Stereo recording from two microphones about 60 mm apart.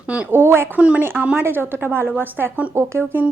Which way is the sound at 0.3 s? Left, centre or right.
Right.